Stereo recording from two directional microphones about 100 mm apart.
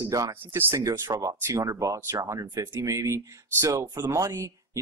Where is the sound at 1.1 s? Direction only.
35° right (ahead or behind).